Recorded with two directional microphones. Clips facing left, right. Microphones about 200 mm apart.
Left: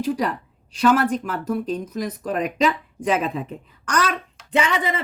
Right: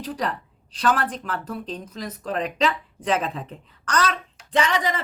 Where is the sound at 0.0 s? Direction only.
10° left (ahead or behind).